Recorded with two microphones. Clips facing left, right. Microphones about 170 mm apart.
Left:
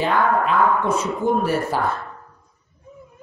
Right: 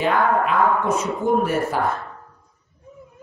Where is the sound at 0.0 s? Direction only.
30° left (ahead or behind).